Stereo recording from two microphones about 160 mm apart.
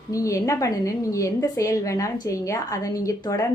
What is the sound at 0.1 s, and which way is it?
Speech, 20° left (ahead or behind).